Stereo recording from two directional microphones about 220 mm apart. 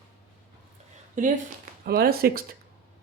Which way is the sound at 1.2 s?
35° right (ahead or behind).